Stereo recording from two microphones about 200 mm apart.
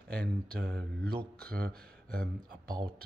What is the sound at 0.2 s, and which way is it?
Speech, 50° right (ahead or behind).